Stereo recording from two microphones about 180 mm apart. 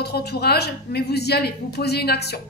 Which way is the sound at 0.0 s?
65° left (ahead or behind).